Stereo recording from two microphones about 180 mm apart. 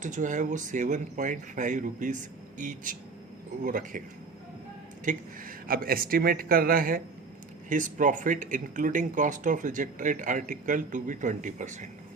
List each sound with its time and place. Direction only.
0.0 s speech: 45° right (ahead or behind)
5.0 s speech: 50° right (ahead or behind)